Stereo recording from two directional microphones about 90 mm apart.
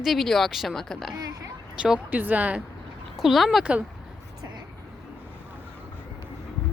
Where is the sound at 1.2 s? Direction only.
40° right (ahead or behind).